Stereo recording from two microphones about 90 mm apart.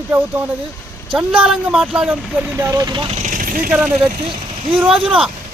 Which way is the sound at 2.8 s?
55° right (ahead or behind).